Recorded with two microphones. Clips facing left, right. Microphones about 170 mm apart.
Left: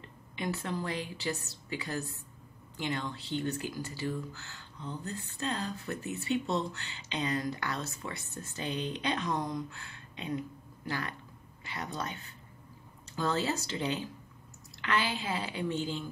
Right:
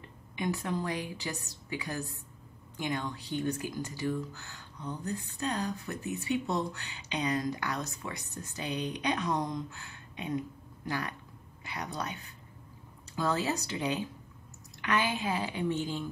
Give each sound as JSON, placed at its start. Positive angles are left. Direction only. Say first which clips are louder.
{"t": 0.4, "sound": "speech", "louder": "right 2 dB", "side_deg": -15}